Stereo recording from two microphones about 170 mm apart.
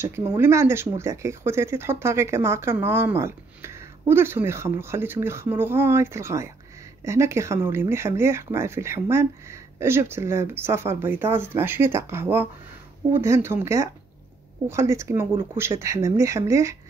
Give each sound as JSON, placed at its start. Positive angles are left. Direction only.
{"t": 0.0, "sound": "speech", "side_deg": -15}